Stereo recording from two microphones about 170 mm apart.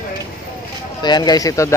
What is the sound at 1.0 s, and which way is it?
Speech, 25° left (ahead or behind).